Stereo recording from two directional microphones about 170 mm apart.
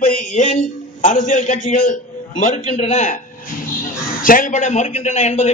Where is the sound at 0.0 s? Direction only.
50° left (ahead or behind).